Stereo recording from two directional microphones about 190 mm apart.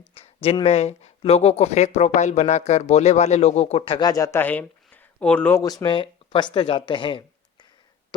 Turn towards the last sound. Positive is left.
turn(degrees=25)  # may be behind; listen again after turning